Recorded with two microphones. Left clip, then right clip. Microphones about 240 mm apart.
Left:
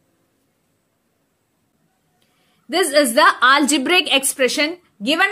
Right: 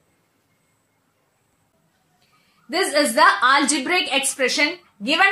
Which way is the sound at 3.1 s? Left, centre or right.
Left.